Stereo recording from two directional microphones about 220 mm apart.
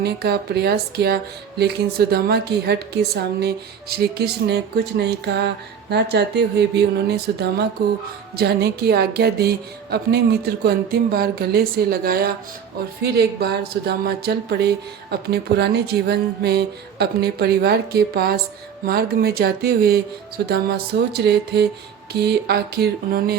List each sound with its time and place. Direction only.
0.0 s speech: 45° right (ahead or behind)